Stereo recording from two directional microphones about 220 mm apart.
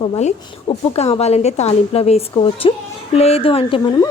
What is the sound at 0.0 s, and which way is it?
A woman's voice, 25° left (ahead or behind).